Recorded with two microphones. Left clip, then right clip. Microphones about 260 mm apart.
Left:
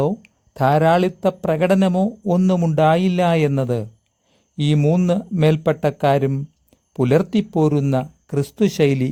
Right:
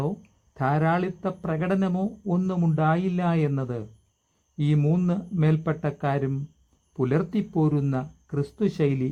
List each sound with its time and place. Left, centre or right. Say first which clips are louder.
0.5 s speech: left 9 dB; left